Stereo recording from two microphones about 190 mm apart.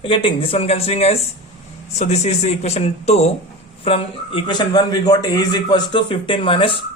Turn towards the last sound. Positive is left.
turn(degrees=25)  # may be behind; listen again after turning